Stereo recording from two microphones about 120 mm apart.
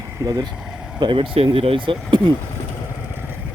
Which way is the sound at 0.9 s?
40° right (ahead or behind).